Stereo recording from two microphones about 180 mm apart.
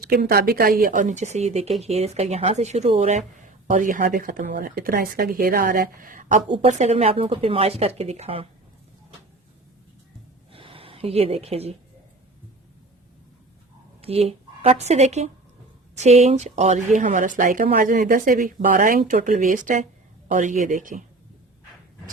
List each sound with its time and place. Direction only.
0.0 s speech: 55° right (ahead or behind)
4.4 s speech: 60° right (ahead or behind)
6.5 s speech: 35° right (ahead or behind)
10.5 s gasp: 30° right (ahead or behind)
14.0 s a woman's voice: 35° right (ahead or behind)